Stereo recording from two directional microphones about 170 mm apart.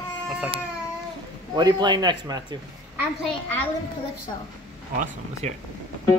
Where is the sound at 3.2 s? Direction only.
10° left (ahead or behind).